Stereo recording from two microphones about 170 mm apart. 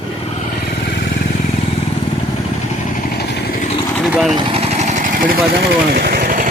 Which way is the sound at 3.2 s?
75° left (ahead or behind).